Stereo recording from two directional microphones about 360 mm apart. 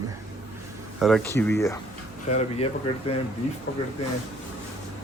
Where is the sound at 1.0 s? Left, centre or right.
Centre.